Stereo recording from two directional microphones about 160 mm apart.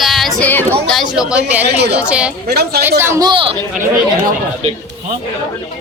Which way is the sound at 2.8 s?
15° right (ahead or behind).